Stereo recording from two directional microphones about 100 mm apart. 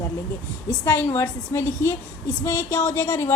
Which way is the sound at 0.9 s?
35° left (ahead or behind).